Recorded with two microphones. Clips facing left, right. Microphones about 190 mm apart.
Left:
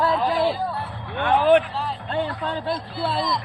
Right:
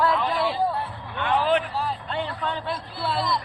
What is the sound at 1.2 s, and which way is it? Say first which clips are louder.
Speech: left 5 dB; 50° left (ahead or behind).